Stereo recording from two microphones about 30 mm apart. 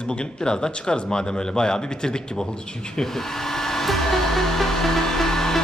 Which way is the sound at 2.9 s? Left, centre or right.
Centre.